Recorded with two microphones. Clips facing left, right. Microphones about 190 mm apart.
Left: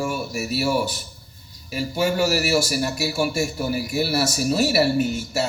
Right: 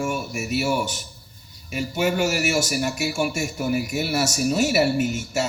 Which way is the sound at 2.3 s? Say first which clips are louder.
Left 2 dB; 35° left (ahead or behind).